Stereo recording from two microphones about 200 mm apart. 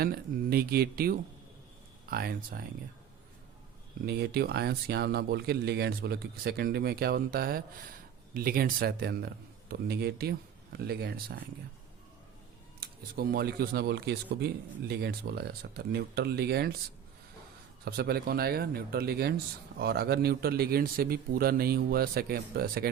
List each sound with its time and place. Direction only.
0.0 s speech: 50° right (ahead or behind)
4.0 s speech: 55° right (ahead or behind)
12.8 s speech: 50° right (ahead or behind)
17.8 s speech: 50° right (ahead or behind)